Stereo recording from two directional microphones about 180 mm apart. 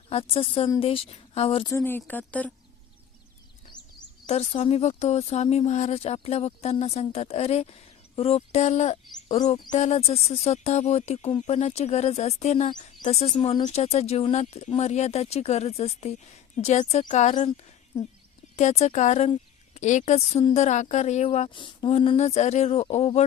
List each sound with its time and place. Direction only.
0.1 s speech: 30° left (ahead or behind)
1.6 s speech: 15° left (ahead or behind)
4.3 s speech: 35° left (ahead or behind)
18.5 s speech: 40° left (ahead or behind)